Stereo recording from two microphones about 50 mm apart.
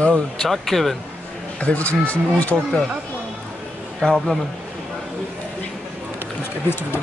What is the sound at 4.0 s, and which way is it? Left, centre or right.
Speech, centre.